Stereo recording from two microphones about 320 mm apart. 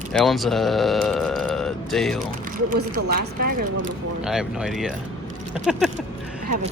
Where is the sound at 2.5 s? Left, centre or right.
Right.